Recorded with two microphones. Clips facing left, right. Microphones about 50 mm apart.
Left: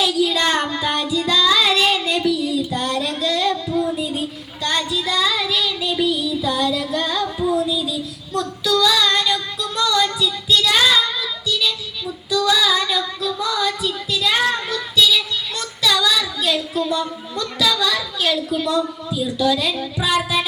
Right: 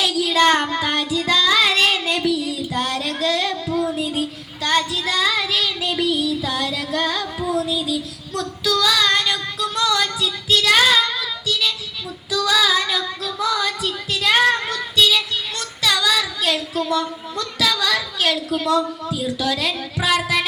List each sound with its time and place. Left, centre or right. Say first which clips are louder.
0.0 s child singing: right 1 dB; right
8.4 s female singing: left 2 dB; right
15.5 s child singing: left 2 dB; right